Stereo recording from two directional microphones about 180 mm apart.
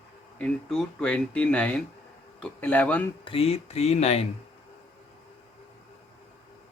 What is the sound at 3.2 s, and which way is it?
Speech, 30° left (ahead or behind).